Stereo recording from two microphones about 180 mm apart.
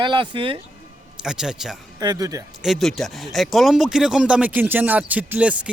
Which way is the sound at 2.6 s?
Centre (ahead or behind).